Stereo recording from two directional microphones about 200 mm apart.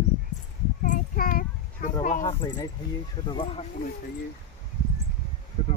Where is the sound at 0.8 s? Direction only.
45° left (ahead or behind).